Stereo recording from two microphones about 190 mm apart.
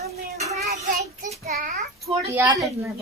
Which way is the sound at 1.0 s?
35° right (ahead or behind).